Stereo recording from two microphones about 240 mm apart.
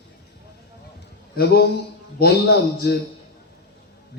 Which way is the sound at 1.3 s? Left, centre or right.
Left.